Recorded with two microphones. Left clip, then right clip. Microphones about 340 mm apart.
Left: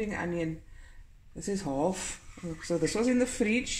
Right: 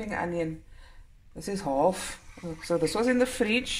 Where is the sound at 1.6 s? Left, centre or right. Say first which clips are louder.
Right 7 dB; right.